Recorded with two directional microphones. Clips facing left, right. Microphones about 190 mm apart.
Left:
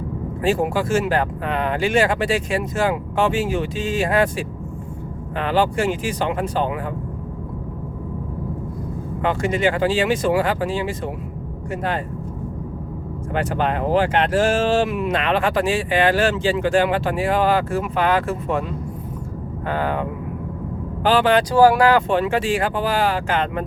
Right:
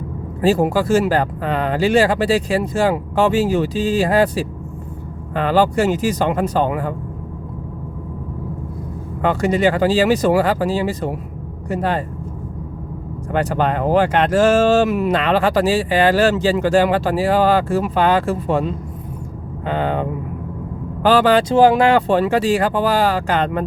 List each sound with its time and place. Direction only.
0.4 s speech: 35° right (ahead or behind)
9.2 s speech: 40° right (ahead or behind)
13.3 s speech: 40° right (ahead or behind)
21.0 s speech: 40° right (ahead or behind)
21.5 s speech: 20° right (ahead or behind); by 23.6 s 40° right (ahead or behind)